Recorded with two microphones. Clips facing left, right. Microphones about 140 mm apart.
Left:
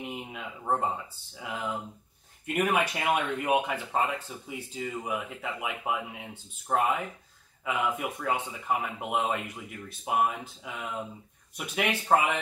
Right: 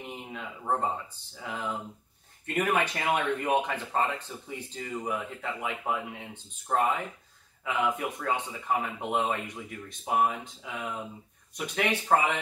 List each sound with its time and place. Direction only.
0.0 s speech: 5° left (ahead or behind)